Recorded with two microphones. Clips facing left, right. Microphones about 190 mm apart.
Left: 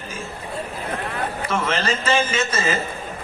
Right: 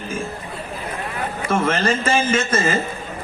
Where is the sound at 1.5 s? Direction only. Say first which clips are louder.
Right 5 dB; 50° right (ahead or behind).